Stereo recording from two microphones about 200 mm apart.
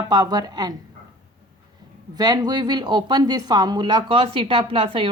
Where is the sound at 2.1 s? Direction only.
20° right (ahead or behind).